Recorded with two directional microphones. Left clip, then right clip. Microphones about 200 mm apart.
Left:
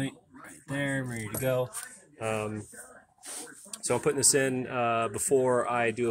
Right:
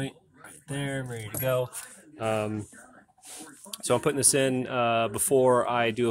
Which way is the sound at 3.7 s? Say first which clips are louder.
Right 2 dB; 15° right (ahead or behind).